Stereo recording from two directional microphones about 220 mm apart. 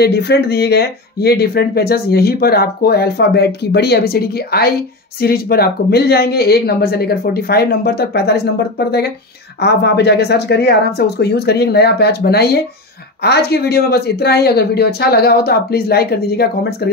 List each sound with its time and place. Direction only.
0.0 s speech: 50° left (ahead or behind)